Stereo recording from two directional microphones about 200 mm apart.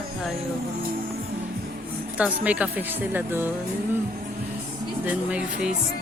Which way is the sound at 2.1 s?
5° right (ahead or behind).